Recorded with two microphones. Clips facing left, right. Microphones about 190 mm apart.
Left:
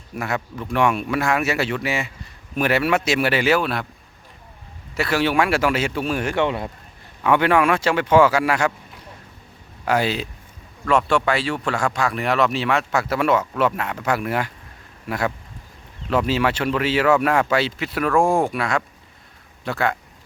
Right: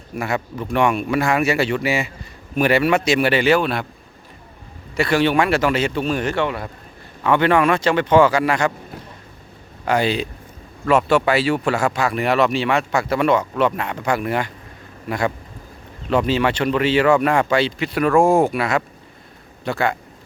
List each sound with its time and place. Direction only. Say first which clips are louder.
0.1 s speech: right 2 dB; centre (ahead or behind)
4.9 s speech: right 3 dB; 5° left (ahead or behind)
6.4 s speech: left 1 dB; 20° left (ahead or behind)
7.3 s speech: right 1 dB; 10° left (ahead or behind)
9.8 s a man's voice: right 2 dB; 5° left (ahead or behind)